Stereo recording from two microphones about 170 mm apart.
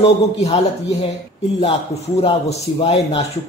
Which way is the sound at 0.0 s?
35° left (ahead or behind).